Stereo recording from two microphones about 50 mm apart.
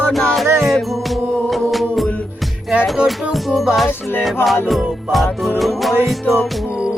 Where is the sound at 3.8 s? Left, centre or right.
Left.